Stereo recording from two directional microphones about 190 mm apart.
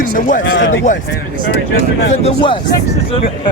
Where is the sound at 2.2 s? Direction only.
25° left (ahead or behind).